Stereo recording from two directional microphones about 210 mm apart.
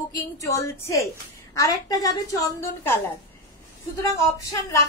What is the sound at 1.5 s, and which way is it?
A woman's voice, 15° left (ahead or behind).